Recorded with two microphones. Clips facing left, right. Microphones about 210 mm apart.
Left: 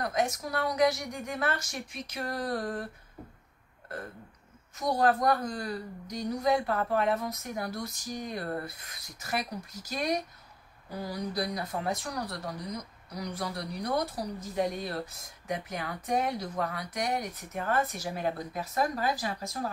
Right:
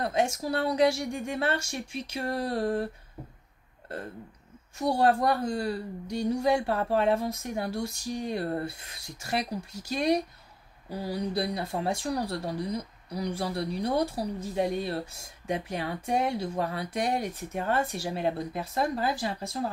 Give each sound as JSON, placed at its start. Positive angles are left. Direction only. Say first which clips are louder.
{"t": 0.0, "sound": "speech", "louder": "right 3 dB", "side_deg": -30}
{"t": 4.7, "sound": "speech", "louder": "right 2 dB", "side_deg": -30}